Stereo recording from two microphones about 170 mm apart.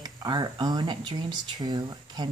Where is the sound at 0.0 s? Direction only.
25° right (ahead or behind).